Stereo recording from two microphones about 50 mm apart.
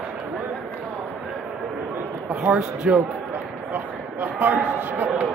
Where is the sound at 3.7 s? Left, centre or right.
Right.